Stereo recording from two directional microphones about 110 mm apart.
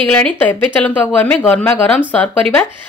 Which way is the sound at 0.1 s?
15° left (ahead or behind).